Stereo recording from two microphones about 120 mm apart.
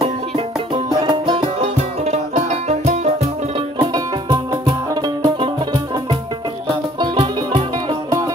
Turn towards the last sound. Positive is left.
turn(degrees=-45)  # may be behind; listen again after turning